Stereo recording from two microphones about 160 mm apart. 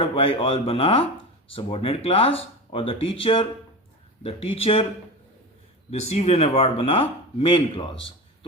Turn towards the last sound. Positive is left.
turn(degrees=35)  # may be behind; listen again after turning